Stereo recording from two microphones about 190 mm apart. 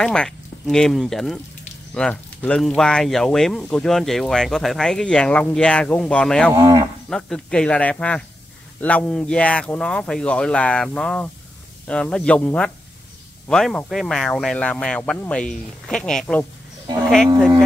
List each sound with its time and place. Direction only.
0.0 s speech: 5° left (ahead or behind)
6.5 s speech: 20° right (ahead or behind)
7.1 s speech: 5° left (ahead or behind)